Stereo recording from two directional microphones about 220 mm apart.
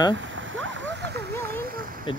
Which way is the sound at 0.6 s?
55° right (ahead or behind).